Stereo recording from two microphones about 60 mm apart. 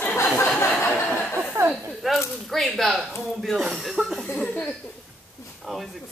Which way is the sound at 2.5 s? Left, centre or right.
Centre.